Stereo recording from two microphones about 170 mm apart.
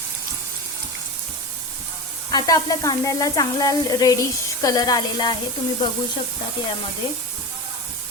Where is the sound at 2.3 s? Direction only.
20° left (ahead or behind).